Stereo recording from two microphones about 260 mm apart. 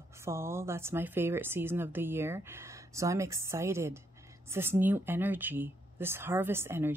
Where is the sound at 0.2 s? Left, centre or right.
Centre.